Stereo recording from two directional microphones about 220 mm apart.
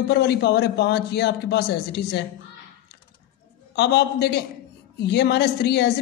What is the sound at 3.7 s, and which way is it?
A woman's voice, 50° left (ahead or behind).